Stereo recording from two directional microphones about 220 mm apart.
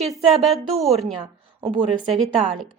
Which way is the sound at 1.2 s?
20° right (ahead or behind).